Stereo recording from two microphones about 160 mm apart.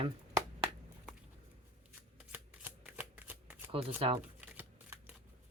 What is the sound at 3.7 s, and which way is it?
Speech, 35° right (ahead or behind).